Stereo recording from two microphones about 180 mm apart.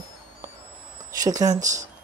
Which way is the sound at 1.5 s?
45° right (ahead or behind).